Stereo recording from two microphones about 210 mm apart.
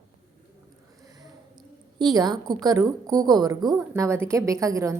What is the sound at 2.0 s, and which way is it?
A woman's voice, 20° right (ahead or behind).